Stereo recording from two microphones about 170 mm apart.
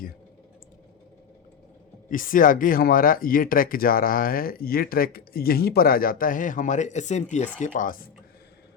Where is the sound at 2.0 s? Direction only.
55° left (ahead or behind).